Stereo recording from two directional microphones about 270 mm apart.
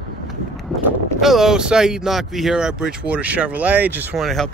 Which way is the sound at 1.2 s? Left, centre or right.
Centre.